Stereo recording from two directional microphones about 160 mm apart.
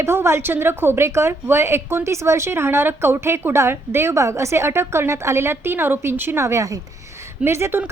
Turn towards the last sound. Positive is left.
turn(degrees=-15)  # may be behind; listen again after turning